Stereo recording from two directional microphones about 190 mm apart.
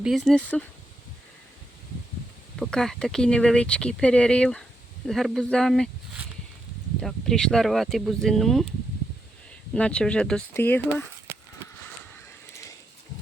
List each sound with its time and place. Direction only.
0.0 s speech: centre (ahead or behind)
2.6 s speech: 5° left (ahead or behind)
9.7 s speech: 5° left (ahead or behind)
11.3 s a sound: 15° right (ahead or behind)